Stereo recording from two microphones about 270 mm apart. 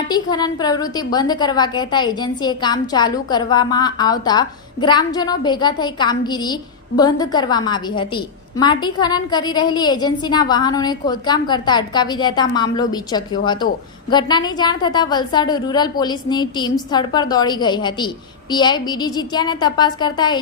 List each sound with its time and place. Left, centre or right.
0.1 s a woman's voice: centre